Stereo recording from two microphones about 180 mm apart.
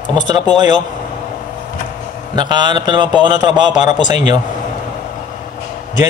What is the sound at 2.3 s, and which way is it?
A man's voice, 25° right (ahead or behind).